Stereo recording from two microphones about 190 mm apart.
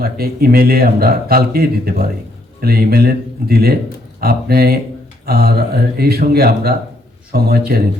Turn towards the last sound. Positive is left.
turn(degrees=-55)  # may be behind; listen again after turning